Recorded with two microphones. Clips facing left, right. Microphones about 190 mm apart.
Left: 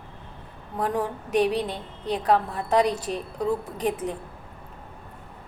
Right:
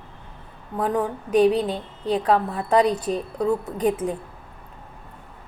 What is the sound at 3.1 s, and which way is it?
Speech, 40° right (ahead or behind).